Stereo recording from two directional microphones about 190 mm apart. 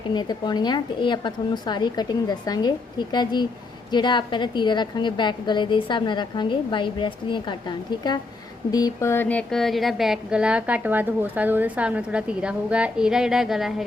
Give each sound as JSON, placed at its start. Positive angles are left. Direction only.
{"t": 0.1, "sound": "a woman's voice", "side_deg": 20}
{"t": 8.7, "sound": "a woman's voice", "side_deg": 15}